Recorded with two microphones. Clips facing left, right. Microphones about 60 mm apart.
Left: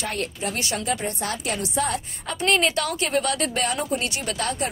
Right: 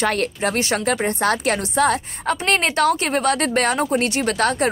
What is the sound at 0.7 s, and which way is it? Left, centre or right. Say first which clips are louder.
A woman's voice: right 6 dB; right.